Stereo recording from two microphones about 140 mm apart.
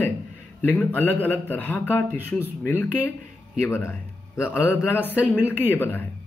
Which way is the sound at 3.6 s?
20° left (ahead or behind).